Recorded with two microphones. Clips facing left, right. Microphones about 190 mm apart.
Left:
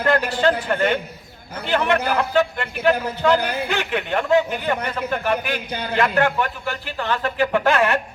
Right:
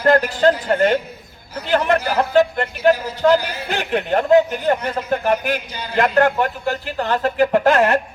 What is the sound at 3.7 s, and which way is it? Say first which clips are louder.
A man's voice: right 8 dB; 40° right (ahead or behind).